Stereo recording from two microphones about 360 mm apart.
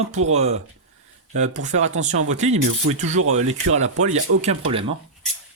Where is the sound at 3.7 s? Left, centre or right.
Centre.